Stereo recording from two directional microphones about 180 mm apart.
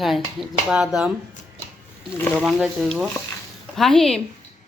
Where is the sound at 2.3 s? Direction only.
5° right (ahead or behind).